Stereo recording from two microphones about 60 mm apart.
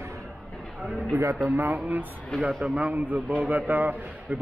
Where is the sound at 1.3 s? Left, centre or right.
Right.